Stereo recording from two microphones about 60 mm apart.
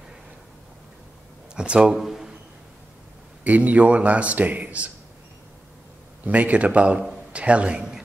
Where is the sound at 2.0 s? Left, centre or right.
Centre.